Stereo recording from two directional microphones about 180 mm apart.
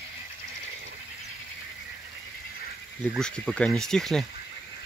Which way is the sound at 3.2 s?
5° left (ahead or behind).